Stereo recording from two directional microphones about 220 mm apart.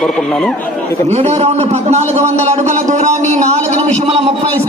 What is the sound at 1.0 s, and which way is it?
A man's voice, 30° right (ahead or behind).